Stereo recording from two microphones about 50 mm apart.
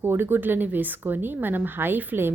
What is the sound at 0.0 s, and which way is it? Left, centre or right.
A woman's voice, right.